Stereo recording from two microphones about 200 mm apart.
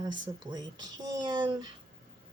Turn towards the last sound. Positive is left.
turn(degrees=-20)  # may be behind; listen again after turning